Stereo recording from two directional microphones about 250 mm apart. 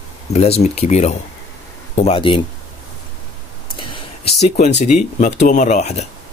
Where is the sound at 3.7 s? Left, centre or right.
Centre.